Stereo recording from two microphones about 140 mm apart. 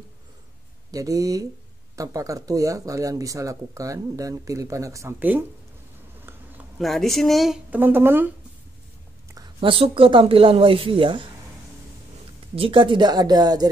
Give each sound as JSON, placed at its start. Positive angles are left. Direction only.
{"t": 0.9, "sound": "speech", "side_deg": -25}
{"t": 6.8, "sound": "speech", "side_deg": 0}
{"t": 7.8, "sound": "speech", "side_deg": -15}
{"t": 9.6, "sound": "speech", "side_deg": -40}
{"t": 12.5, "sound": "speech", "side_deg": -40}